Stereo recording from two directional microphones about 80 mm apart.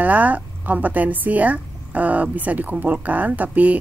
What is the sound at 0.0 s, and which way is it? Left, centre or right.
Speech, centre.